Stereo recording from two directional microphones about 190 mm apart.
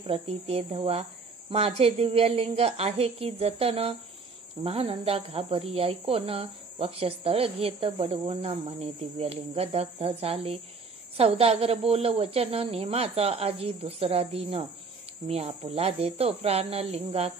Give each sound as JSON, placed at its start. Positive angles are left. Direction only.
{"t": 0.0, "sound": "speech", "side_deg": -30}